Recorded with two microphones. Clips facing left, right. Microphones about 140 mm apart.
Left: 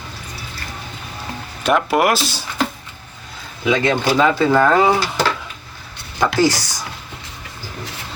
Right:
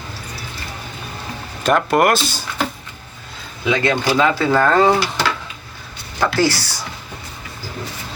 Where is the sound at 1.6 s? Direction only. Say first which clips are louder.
Right 1 dB; 5° left (ahead or behind).